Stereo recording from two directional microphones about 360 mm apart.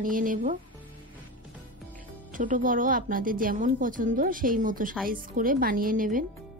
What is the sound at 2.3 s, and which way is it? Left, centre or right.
Speech, right.